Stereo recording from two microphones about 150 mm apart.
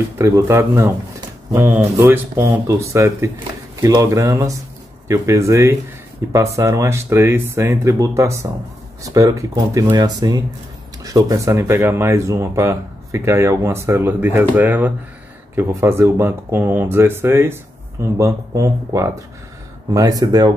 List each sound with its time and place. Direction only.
0.2 s speech: 20° right (ahead or behind)